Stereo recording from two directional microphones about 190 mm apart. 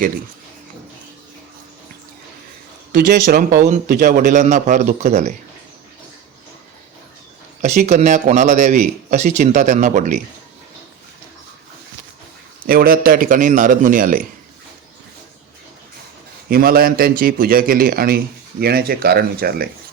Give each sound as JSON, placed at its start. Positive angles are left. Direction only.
{"t": 2.9, "sound": "speech", "side_deg": -45}
{"t": 7.6, "sound": "speech", "side_deg": -40}
{"t": 12.6, "sound": "speech", "side_deg": -50}
{"t": 16.5, "sound": "speech", "side_deg": -50}